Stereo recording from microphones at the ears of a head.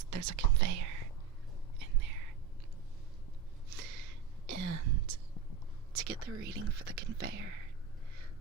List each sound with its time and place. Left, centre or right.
0.0 s speech: right
1.8 s whispering: right
3.7 s whispering: right
5.9 s speech: right